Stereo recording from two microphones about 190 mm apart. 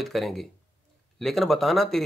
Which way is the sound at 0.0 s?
Centre (ahead or behind).